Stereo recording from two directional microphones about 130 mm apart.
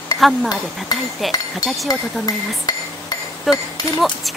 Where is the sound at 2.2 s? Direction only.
30° left (ahead or behind).